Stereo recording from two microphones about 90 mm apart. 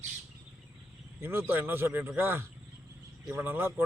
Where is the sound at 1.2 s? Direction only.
25° right (ahead or behind).